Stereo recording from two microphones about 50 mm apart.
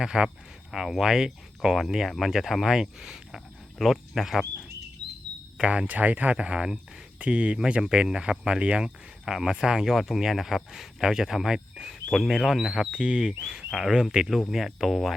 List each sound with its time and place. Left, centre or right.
0.0 s speech: centre
5.5 s speech: right
6.3 s speech: centre
7.6 s speech: centre
13.0 s speech: right
13.7 s speech: centre
13.9 s speech: centre
14.5 s speech: centre